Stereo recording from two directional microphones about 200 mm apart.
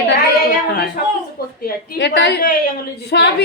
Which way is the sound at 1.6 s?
60° left (ahead or behind).